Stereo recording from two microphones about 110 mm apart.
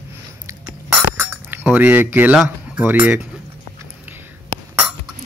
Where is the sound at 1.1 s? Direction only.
20° right (ahead or behind).